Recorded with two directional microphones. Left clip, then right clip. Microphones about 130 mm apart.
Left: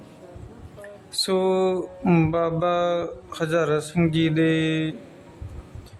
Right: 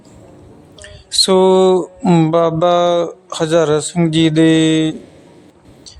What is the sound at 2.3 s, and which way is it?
Mantra, 50° right (ahead or behind).